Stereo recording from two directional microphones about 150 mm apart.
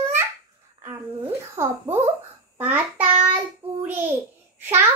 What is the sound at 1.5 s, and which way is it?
A child's voice, 20° right (ahead or behind).